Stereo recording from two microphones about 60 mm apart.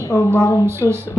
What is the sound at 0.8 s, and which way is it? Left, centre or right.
Speech, left.